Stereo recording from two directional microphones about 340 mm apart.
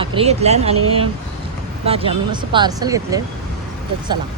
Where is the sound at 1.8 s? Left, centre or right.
Centre.